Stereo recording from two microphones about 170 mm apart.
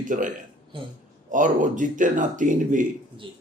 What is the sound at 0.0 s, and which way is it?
A man's voice, 50° right (ahead or behind).